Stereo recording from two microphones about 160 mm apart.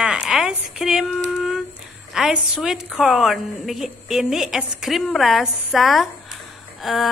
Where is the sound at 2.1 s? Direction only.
5° right (ahead or behind).